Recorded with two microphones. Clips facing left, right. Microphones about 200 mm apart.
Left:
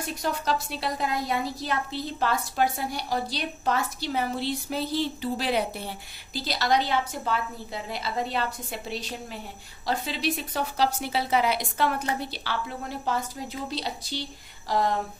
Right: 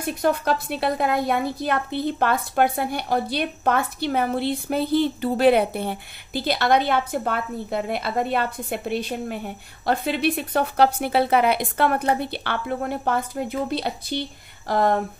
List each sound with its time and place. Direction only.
0.0 s a woman's voice: 55° right (ahead or behind)